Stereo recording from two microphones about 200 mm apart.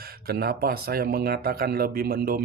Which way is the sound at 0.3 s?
50° right (ahead or behind).